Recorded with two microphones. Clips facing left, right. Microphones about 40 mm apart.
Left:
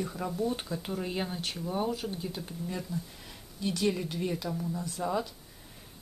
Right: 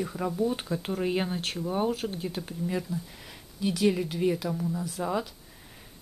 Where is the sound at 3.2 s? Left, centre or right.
Centre.